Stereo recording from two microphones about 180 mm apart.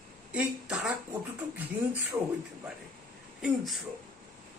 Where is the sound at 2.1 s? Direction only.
15° right (ahead or behind).